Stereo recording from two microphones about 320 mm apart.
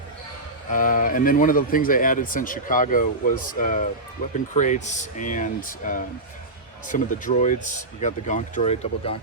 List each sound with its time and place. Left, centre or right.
0.7 s speech: left